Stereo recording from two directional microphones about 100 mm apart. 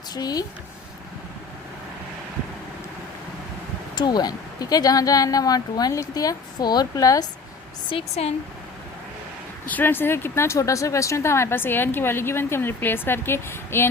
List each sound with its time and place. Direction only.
0.1 s speech: 40° left (ahead or behind)
3.9 s speech: 45° left (ahead or behind)
7.9 s speech: 75° left (ahead or behind)
9.6 s speech: 20° left (ahead or behind)